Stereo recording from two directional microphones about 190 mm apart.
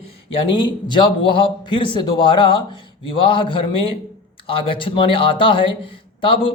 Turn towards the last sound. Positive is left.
turn(degrees=25)  # may be behind; listen again after turning